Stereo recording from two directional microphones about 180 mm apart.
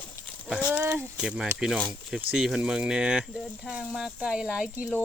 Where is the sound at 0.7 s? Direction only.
10° right (ahead or behind).